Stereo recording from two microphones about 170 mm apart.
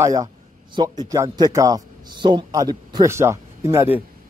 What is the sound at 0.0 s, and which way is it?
A man's voice, 20° right (ahead or behind).